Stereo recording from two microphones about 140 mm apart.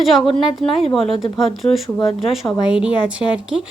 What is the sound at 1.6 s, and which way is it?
Speech, 20° left (ahead or behind).